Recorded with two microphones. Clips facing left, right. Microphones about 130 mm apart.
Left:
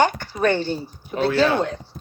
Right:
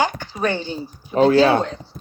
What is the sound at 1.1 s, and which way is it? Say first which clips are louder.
Speech: right 7 dB; 40° right (ahead or behind).